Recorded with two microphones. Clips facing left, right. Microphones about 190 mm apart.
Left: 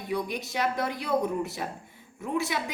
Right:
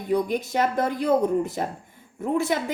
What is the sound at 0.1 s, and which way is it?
A woman's voice, 50° right (ahead or behind).